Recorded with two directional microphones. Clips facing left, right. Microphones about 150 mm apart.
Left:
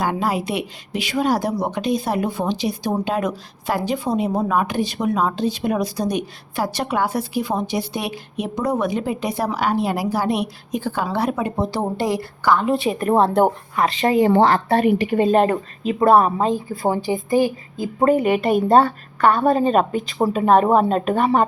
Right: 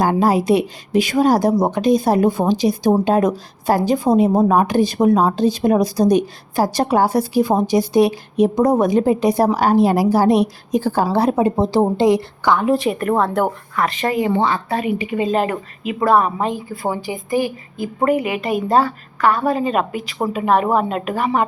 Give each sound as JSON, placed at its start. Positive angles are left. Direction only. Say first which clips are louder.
{"t": 0.0, "sound": "speech", "louder": "right 6 dB", "side_deg": -40}
{"t": 12.5, "sound": "speech", "louder": "right 3 dB", "side_deg": 0}
{"t": 12.9, "sound": "speech", "louder": "left 1 dB", "side_deg": 25}
{"t": 14.2, "sound": "speech", "louder": "left 4 dB", "side_deg": 45}
{"t": 14.8, "sound": "speech", "louder": "left 1 dB", "side_deg": 0}
{"t": 15.8, "sound": "speech", "louder": "left 1 dB", "side_deg": 30}
{"t": 17.0, "sound": "a woman's voice", "louder": "left 4 dB", "side_deg": -20}
{"t": 17.2, "sound": "speech", "louder": "even", "side_deg": 20}
{"t": 18.3, "sound": "speech", "louder": "left 3 dB", "side_deg": 0}
{"t": 20.3, "sound": "a woman's voice", "louder": "left 2 dB", "side_deg": 35}